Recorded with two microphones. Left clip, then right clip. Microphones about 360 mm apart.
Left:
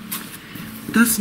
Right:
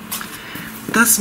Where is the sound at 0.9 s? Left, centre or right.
Centre.